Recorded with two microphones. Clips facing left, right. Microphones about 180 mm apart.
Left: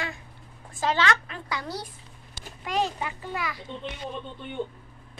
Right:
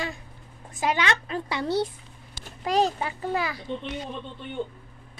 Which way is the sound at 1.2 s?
30° right (ahead or behind).